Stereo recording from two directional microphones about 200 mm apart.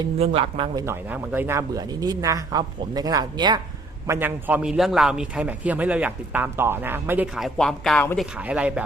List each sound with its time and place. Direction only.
0.0 s speech: 25° right (ahead or behind)
0.9 s a man's voice: 10° right (ahead or behind)
8.4 s a man's voice: 5° right (ahead or behind)